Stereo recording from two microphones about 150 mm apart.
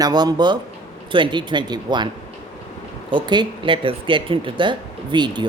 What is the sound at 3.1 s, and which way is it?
A woman's voice, 30° right (ahead or behind).